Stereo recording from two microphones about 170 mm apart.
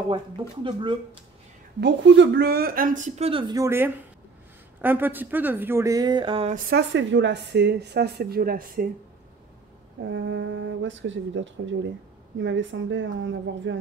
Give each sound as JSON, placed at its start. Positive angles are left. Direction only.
{"t": 0.7, "sound": "speech", "side_deg": -30}
{"t": 1.8, "sound": "speech", "side_deg": -90}
{"t": 6.5, "sound": "speech", "side_deg": -80}
{"t": 10.0, "sound": "speech", "side_deg": -90}